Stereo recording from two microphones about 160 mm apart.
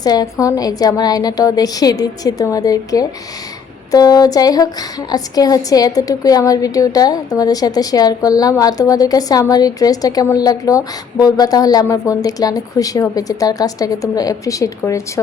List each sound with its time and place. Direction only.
0.0 s a woman's voice: 25° left (ahead or behind)